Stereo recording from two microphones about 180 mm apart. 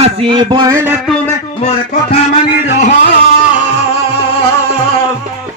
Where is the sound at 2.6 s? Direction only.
70° left (ahead or behind).